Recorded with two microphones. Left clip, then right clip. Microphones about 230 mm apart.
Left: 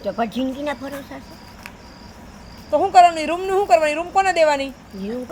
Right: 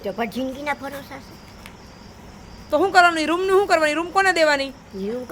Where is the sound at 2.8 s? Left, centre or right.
Right.